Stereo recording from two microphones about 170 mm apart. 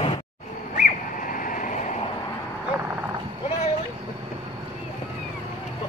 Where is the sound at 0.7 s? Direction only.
55° left (ahead or behind).